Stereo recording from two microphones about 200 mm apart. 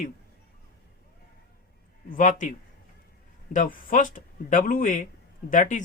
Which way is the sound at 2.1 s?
40° left (ahead or behind).